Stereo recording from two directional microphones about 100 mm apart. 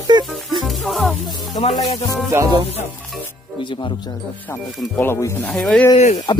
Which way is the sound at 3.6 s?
55° left (ahead or behind).